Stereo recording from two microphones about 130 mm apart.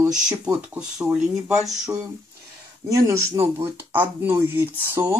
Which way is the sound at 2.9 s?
25° right (ahead or behind).